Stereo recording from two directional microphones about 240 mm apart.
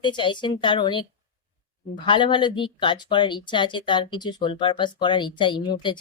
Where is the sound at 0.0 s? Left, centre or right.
Centre.